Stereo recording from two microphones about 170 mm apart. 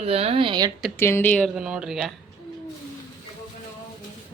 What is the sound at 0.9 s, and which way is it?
Speech, 15° left (ahead or behind).